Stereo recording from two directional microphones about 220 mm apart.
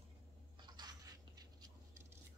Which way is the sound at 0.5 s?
20° right (ahead or behind).